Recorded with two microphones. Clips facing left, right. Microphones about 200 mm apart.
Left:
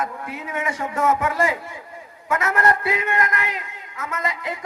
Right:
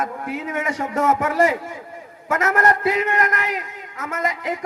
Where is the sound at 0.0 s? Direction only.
45° right (ahead or behind).